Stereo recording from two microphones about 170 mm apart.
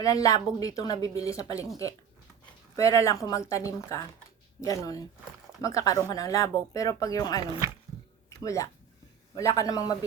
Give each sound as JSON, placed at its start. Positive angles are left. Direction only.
{"t": 0.0, "sound": "speech", "side_deg": 20}
{"t": 2.7, "sound": "speech", "side_deg": 20}
{"t": 8.4, "sound": "speech", "side_deg": 20}